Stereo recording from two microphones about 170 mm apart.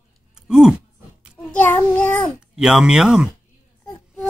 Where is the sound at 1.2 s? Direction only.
5° left (ahead or behind).